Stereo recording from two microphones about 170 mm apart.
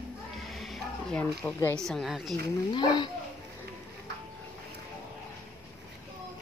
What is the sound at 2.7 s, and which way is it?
Speech, 25° left (ahead or behind).